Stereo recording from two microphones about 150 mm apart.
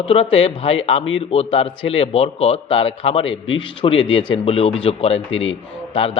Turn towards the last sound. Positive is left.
turn(degrees=35)  # may be behind; listen again after turning